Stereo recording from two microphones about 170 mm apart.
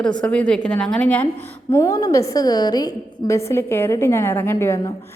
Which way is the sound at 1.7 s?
20° left (ahead or behind).